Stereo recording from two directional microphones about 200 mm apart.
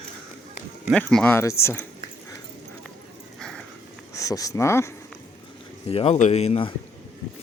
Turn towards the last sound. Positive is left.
turn(degrees=30)  # may be behind; listen again after turning